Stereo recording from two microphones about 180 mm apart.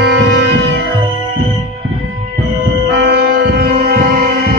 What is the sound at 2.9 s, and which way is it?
Music, 65° right (ahead or behind).